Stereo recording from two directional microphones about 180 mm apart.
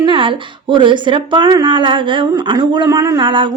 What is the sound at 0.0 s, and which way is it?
A woman's voice, 25° right (ahead or behind).